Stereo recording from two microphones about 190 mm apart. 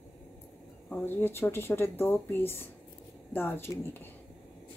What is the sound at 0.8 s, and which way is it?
Speech, 10° left (ahead or behind).